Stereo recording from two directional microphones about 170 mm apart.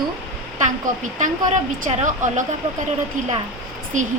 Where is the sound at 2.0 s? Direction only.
45° right (ahead or behind).